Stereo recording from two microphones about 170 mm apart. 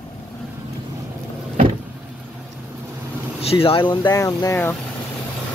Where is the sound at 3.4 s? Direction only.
35° left (ahead or behind); by 4.7 s 15° left (ahead or behind).